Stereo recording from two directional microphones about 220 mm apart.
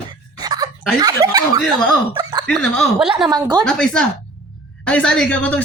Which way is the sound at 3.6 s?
5° left (ahead or behind).